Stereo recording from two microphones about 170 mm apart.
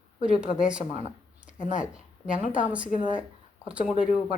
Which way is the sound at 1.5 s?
50° left (ahead or behind).